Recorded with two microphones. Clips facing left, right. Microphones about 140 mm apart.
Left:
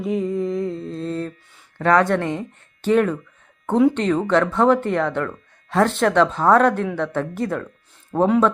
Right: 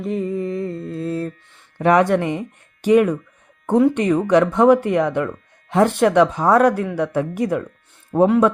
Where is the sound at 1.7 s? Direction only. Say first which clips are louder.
Right 2 dB; 15° right (ahead or behind).